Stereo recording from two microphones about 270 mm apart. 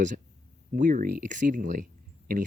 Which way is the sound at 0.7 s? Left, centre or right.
Right.